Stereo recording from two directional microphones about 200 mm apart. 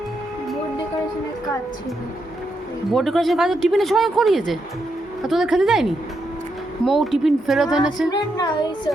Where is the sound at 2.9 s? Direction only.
Centre (ahead or behind).